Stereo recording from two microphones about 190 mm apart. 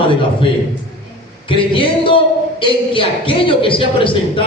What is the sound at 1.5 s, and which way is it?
Music, 25° left (ahead or behind).